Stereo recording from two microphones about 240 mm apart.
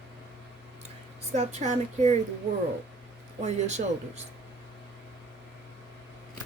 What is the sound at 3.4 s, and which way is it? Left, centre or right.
Speech, right.